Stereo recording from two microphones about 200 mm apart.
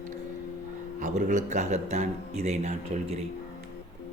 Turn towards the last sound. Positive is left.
turn(degrees=-35)  # may be behind; listen again after turning